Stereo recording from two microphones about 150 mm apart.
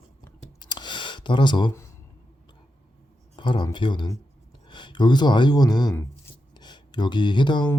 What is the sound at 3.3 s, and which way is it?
Speech, 30° left (ahead or behind).